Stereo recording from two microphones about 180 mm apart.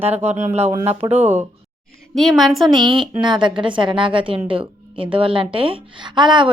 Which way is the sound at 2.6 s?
25° right (ahead or behind).